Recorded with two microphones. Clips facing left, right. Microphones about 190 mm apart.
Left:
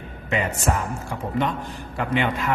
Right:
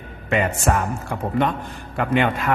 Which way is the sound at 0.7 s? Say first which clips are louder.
Right 3 dB; 60° right (ahead or behind).